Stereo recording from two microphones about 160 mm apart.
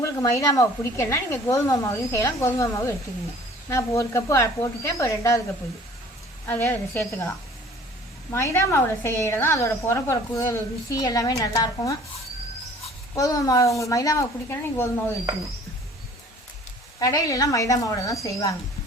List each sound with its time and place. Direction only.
0.0 s a woman's voice: 20° left (ahead or behind)
6.4 s a woman's voice: 15° left (ahead or behind)
8.3 s a woman's voice: 15° left (ahead or behind)
13.1 s a woman's voice: 20° left (ahead or behind)
17.0 s a woman's voice: 20° left (ahead or behind)